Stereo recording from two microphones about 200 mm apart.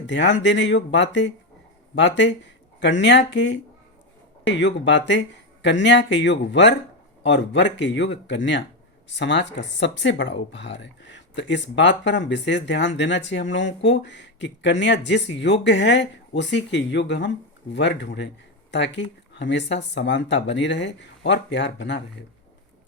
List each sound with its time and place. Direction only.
0.1 s speech: 65° left (ahead or behind)